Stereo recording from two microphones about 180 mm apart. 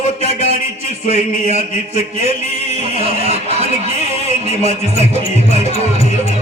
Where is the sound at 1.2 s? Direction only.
35° right (ahead or behind).